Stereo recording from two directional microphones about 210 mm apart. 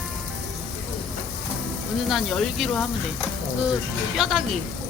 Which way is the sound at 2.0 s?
Centre (ahead or behind).